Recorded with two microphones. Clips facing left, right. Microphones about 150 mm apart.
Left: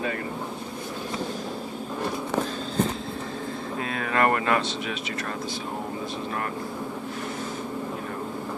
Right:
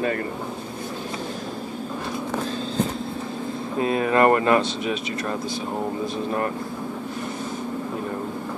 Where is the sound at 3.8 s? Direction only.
25° right (ahead or behind).